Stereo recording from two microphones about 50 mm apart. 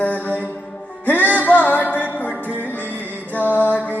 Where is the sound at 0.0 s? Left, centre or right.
Left.